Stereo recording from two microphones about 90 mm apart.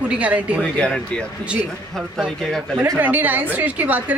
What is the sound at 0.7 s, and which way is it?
Speech, 10° left (ahead or behind).